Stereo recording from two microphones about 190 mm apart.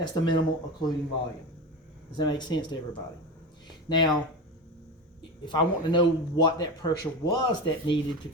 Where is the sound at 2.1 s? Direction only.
25° left (ahead or behind).